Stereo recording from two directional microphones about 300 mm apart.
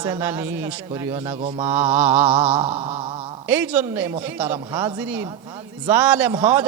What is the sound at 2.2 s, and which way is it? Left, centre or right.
A man's voice, centre.